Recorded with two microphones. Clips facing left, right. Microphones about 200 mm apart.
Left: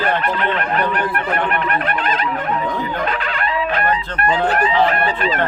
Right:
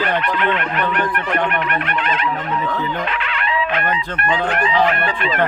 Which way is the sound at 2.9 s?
40° left (ahead or behind).